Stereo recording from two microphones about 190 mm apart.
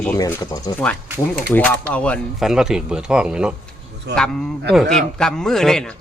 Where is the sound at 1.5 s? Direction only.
10° left (ahead or behind).